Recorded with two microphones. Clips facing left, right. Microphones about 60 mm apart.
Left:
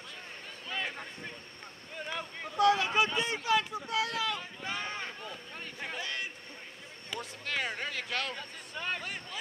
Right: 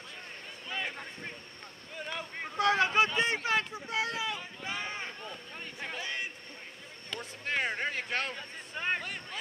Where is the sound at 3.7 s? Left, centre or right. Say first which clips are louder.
Left 1 dB; right.